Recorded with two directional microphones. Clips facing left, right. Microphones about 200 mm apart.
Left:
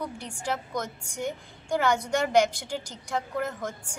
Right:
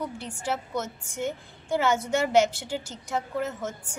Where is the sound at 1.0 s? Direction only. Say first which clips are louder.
Right 1 dB; 10° left (ahead or behind).